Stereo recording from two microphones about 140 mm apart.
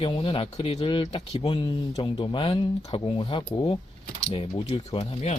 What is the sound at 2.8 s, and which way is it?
Speech, 45° left (ahead or behind).